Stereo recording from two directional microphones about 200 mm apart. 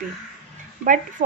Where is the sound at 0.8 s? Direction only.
40° right (ahead or behind).